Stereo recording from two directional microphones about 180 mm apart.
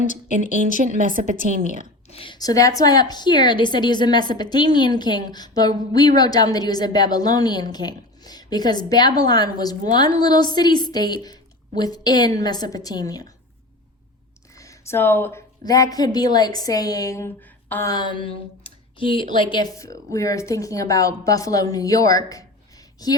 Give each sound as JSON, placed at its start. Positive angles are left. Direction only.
{"t": 0.8, "sound": "a woman's voice", "side_deg": -50}
{"t": 2.0, "sound": "a woman's voice", "side_deg": 30}
{"t": 14.5, "sound": "a woman's voice", "side_deg": 20}